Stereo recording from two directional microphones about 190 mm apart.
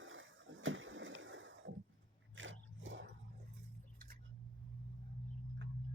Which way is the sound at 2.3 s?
90° right.